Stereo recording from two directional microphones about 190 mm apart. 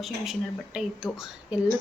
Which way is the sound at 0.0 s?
Centre (ahead or behind).